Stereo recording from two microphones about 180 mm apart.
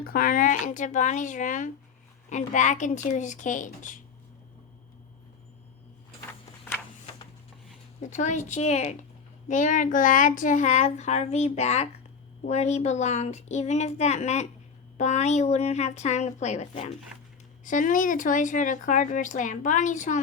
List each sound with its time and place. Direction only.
0.0 s speech: 55° left (ahead or behind)
8.1 s speech: 40° left (ahead or behind)